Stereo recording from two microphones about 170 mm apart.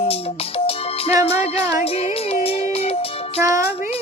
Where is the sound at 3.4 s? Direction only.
15° right (ahead or behind).